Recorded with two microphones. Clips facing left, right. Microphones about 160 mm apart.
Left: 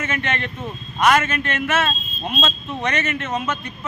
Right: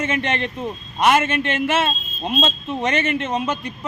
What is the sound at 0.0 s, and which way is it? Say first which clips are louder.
A man's voice: right 3 dB; 30° right (ahead or behind).